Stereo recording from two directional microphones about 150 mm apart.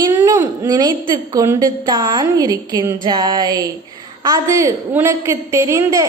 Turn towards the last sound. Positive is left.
turn(degrees=-20)  # may be behind; listen again after turning